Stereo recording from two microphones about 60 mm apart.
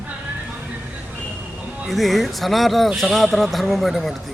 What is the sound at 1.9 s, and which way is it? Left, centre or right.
A man's voice, centre.